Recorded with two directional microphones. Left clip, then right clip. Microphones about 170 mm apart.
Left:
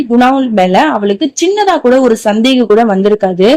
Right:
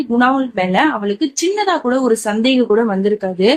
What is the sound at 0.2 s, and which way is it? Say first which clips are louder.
Speech: left 6 dB; 35° left (ahead or behind).